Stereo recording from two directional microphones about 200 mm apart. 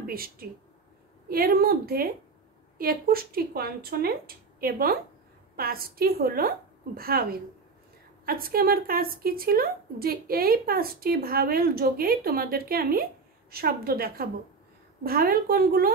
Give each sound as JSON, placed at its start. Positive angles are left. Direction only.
{"t": 0.0, "sound": "a woman's voice", "side_deg": -45}
{"t": 8.3, "sound": "a woman's voice", "side_deg": -45}